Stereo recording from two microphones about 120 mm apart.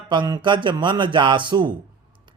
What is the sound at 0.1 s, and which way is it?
A man's voice, 40° right (ahead or behind).